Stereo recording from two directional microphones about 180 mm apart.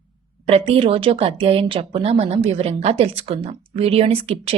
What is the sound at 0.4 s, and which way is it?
A woman's voice, 30° right (ahead or behind).